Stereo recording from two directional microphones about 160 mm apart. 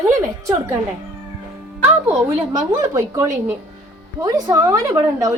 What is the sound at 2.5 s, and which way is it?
A woman's voice, 20° right (ahead or behind).